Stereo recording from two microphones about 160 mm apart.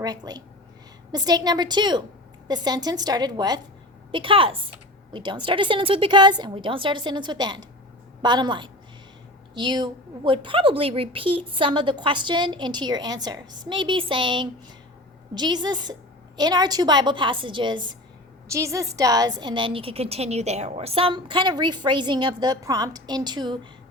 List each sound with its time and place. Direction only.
0.0 s a woman's voice: 25° right (ahead or behind)
18.4 s a woman's voice: 20° right (ahead or behind)